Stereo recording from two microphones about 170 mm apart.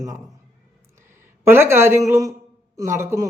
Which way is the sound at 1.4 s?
15° right (ahead or behind).